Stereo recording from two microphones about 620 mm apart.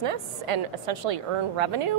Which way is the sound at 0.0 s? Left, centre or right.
Right.